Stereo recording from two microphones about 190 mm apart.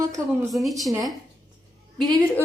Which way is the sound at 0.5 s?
Centre (ahead or behind).